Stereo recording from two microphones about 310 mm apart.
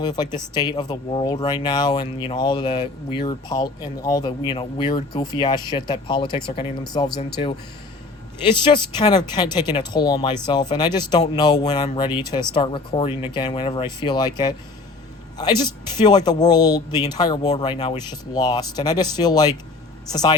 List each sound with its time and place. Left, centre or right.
0.0 s speech: centre
8.4 s speech: centre